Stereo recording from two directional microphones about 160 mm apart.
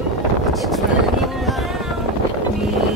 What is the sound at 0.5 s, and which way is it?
Speech, centre (ahead or behind).